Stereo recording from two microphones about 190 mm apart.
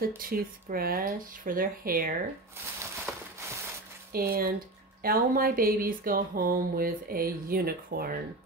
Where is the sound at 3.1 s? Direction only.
Centre (ahead or behind).